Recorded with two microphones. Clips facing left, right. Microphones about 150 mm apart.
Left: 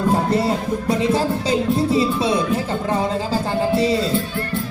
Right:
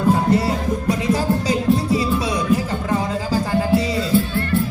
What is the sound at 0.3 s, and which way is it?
Music, 30° left (ahead or behind).